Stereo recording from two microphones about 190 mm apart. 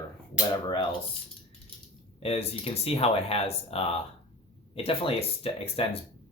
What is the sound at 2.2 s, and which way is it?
Speech, 30° left (ahead or behind).